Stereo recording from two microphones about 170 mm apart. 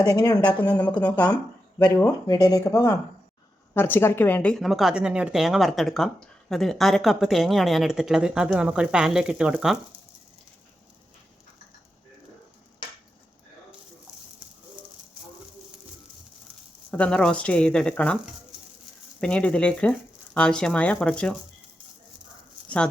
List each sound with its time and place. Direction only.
0.0 s speech: 20° left (ahead or behind)
0.7 s speech: 5° left (ahead or behind)
1.1 s a woman's voice: 25° left (ahead or behind); by 9.7 s 5° right (ahead or behind)
16.9 s speech: 5° left (ahead or behind)
19.2 s speech: 5° left (ahead or behind)